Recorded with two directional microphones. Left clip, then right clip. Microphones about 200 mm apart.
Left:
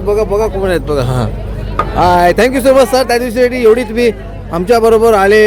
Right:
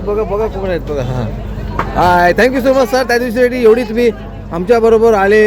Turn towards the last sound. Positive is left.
turn(degrees=10)  # may be behind; listen again after turning